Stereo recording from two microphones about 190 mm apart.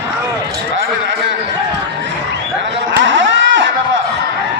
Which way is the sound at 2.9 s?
80° right.